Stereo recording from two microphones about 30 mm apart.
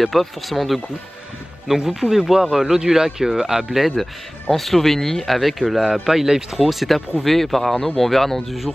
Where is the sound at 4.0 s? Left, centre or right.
Centre.